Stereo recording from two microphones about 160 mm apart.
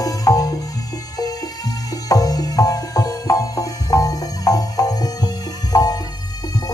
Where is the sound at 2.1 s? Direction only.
25° left (ahead or behind).